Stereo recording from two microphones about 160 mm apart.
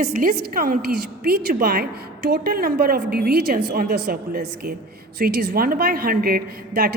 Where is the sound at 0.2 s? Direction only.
65° right (ahead or behind).